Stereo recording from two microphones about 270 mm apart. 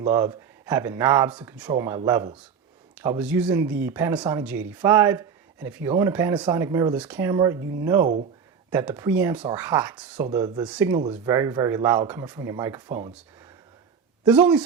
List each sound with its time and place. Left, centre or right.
0.0 s speech: centre
14.3 s speech: centre